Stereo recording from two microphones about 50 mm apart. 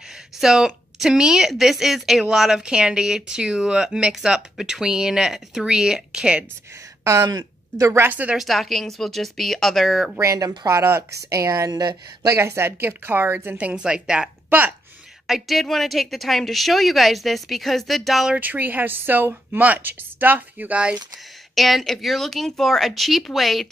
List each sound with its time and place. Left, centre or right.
0.4 s a woman's voice: centre
8.4 s a woman's voice: centre
10.2 s speech: right
11.1 s speech: right
12.3 s speech: right
13.6 s a woman's voice: right
15.2 s a woman's voice: centre
18.4 s speech: right
21.5 s a woman's voice: centre